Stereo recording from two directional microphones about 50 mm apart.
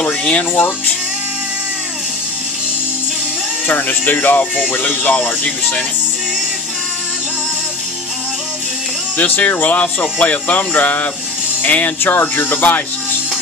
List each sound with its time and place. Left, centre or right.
0.3 s speech: left
3.6 s speech: left
9.2 s speech: left
12.0 s speech: left